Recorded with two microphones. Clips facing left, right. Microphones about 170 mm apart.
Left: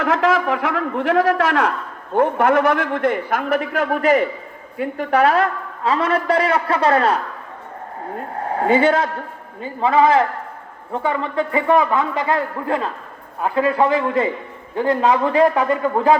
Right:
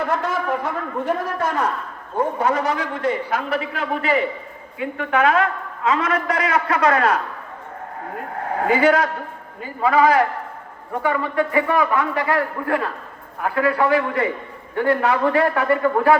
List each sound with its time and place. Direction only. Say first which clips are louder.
0.0 s a man's voice: left 5 dB; 90° left
2.1 s a man's voice: left 5 dB; 65° left (ahead or behind); by 7.2 s 30° left (ahead or behind)
8.5 s a man's voice: left 1 dB; 30° left (ahead or behind)